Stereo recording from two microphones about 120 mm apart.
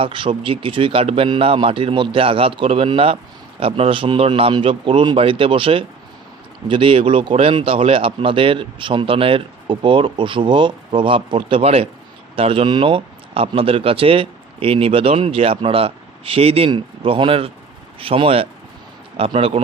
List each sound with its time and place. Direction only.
0.0 s speech: 50° right (ahead or behind)